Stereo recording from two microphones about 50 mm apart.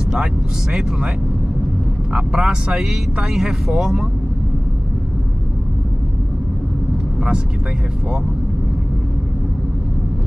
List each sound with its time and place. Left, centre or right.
0.1 s speech: centre
2.1 s speech: centre
2.7 s speech: centre